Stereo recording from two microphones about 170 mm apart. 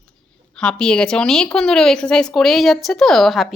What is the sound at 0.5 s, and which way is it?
Speech, 5° left (ahead or behind).